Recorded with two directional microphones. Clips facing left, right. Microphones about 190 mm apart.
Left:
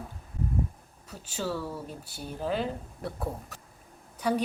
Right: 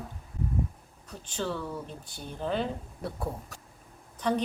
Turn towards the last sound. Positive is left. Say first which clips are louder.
# even
turn(degrees=10)  # may be behind; listen again after turning